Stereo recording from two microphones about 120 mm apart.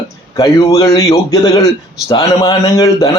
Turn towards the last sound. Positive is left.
turn(degrees=30)  # may be behind; listen again after turning